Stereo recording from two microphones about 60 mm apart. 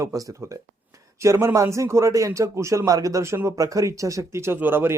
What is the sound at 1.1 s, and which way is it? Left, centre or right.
A man's voice, right.